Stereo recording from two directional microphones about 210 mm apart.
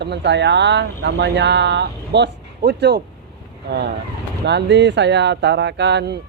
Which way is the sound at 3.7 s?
50° right (ahead or behind).